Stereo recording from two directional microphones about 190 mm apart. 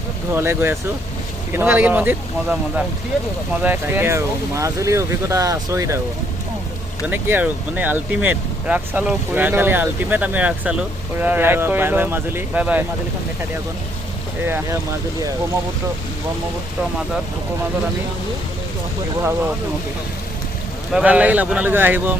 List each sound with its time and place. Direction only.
0.3 s speech: 10° right (ahead or behind)
7.0 s speech: 10° right (ahead or behind)
14.4 s speech: 10° right (ahead or behind)
20.9 s speech: 5° right (ahead or behind)